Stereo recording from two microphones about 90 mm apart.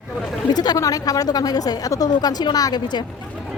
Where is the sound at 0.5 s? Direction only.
50° left (ahead or behind).